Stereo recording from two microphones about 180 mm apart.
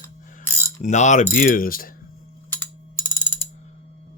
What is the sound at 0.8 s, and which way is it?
Speech, 40° left (ahead or behind).